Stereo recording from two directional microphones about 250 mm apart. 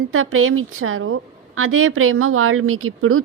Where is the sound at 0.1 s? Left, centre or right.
Right.